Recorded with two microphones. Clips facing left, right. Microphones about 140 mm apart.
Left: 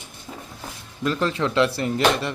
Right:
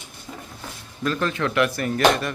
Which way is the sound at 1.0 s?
25° left (ahead or behind).